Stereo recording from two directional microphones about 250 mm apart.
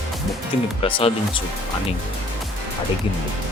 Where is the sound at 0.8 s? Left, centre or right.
Left.